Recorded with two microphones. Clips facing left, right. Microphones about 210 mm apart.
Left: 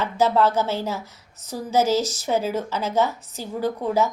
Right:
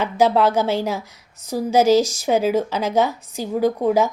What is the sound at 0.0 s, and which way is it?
A woman's voice, 15° right (ahead or behind).